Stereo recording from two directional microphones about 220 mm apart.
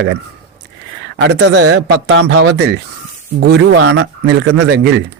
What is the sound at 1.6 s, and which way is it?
Speech, 70° right (ahead or behind).